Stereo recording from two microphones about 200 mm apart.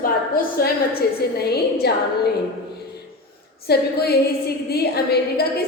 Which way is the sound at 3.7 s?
50° left (ahead or behind).